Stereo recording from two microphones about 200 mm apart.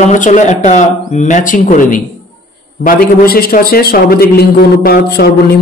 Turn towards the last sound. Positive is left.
turn(degrees=50)  # may be behind; listen again after turning